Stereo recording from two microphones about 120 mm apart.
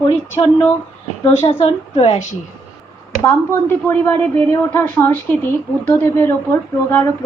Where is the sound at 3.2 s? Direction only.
20° left (ahead or behind).